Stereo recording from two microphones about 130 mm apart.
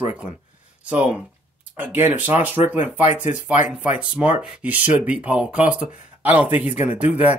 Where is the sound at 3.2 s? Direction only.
70° left (ahead or behind).